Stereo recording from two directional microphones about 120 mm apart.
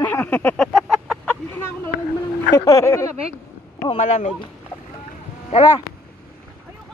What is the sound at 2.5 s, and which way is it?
Speech, 30° left (ahead or behind).